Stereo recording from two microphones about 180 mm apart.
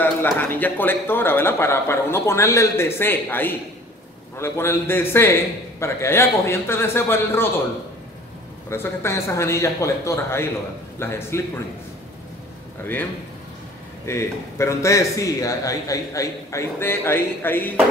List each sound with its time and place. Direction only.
0.0 s a man's voice: 10° left (ahead or behind)
8.6 s a man's voice: 15° left (ahead or behind)
14.0 s a man's voice: 15° left (ahead or behind)